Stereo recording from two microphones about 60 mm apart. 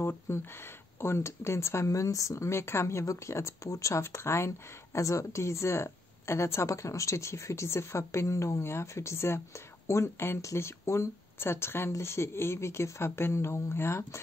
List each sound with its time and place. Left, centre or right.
0.0 s speech: left
4.0 s speech: left
10.4 s speech: left